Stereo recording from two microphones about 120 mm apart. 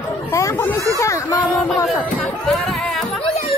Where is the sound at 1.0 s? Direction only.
30° left (ahead or behind).